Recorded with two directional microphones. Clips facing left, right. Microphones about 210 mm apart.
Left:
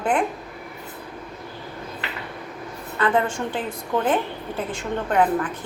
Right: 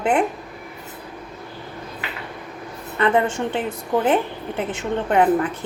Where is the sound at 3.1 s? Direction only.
20° right (ahead or behind).